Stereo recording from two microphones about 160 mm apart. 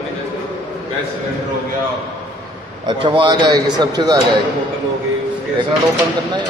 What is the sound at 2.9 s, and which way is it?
A man's voice, 30° right (ahead or behind).